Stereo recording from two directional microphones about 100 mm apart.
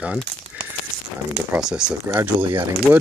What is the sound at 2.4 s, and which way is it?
Speech, 60° right (ahead or behind).